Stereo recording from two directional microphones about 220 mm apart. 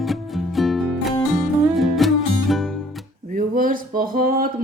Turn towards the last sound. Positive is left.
turn(degrees=-40)  # may be behind; listen again after turning